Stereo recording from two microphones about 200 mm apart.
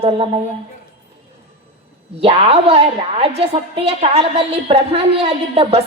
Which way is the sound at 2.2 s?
30° right (ahead or behind).